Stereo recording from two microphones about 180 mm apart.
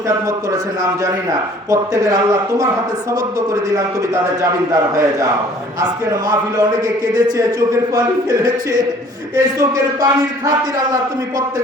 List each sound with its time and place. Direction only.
1.7 s a man's voice: 20° right (ahead or behind)
5.8 s a man's voice: 20° right (ahead or behind)